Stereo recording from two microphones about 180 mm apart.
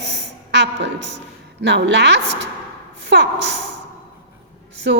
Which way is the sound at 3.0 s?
75° right (ahead or behind).